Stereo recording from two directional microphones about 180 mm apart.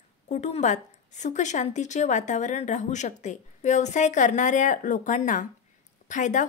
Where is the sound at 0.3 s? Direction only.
40° left (ahead or behind).